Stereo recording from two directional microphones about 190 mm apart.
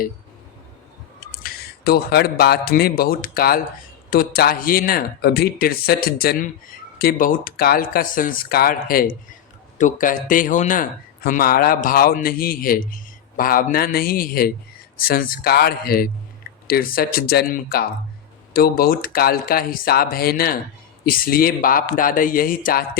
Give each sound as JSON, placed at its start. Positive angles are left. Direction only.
{"t": 1.5, "sound": "speech", "side_deg": 55}